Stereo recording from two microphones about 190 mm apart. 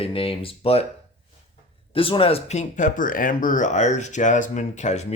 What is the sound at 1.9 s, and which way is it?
Speech, 30° left (ahead or behind).